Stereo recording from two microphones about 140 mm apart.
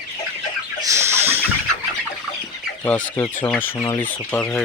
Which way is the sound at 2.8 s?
10° left (ahead or behind).